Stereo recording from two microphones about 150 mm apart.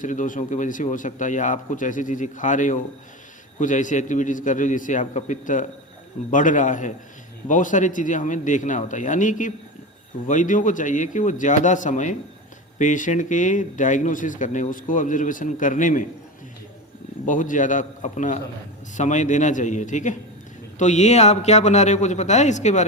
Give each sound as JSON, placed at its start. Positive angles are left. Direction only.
{"t": 0.0, "sound": "speech", "side_deg": 60}
{"t": 17.2, "sound": "a man's voice", "side_deg": 60}